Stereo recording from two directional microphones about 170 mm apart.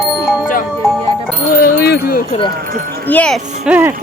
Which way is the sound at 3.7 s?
10° right (ahead or behind).